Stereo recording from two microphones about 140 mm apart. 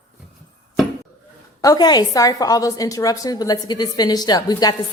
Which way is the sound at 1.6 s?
25° left (ahead or behind).